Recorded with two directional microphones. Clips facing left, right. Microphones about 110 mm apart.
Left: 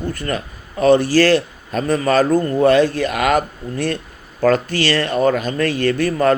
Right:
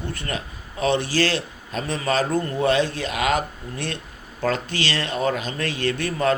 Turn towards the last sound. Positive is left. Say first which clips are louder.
# left 6 dB
turn(degrees=50)  # may be behind; listen again after turning